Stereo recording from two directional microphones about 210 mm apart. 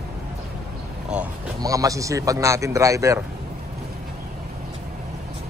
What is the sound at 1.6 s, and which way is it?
Speech, 15° right (ahead or behind).